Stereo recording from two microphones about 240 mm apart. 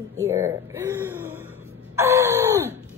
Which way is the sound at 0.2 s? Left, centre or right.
Centre.